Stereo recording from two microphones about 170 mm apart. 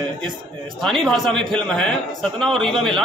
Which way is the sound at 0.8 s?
Centre (ahead or behind).